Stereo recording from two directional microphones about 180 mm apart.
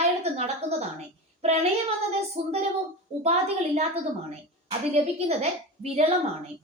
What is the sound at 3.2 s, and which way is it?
A woman's voice, 35° right (ahead or behind).